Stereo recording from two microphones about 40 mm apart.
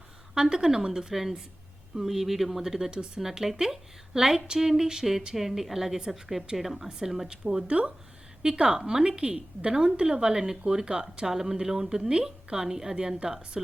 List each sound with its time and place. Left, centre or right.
0.3 s a woman's voice: centre
7.7 s a woman's voice: right
8.8 s a woman's voice: centre